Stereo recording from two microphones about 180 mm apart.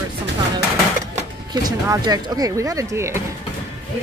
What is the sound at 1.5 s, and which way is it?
Speech, 20° right (ahead or behind).